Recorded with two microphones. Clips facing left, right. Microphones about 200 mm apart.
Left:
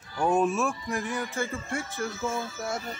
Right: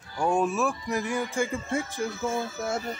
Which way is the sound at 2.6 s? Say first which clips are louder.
Right 2 dB; 20° right (ahead or behind).